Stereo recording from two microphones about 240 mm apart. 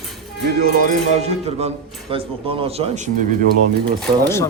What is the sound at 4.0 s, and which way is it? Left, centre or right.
Speech, centre.